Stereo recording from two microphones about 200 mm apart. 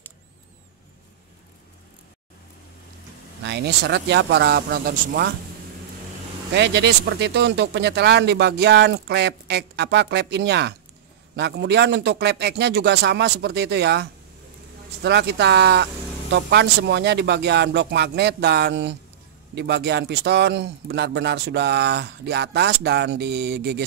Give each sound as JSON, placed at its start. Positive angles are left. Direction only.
{"t": 3.4, "sound": "speech", "side_deg": -55}
{"t": 6.5, "sound": "speech", "side_deg": -60}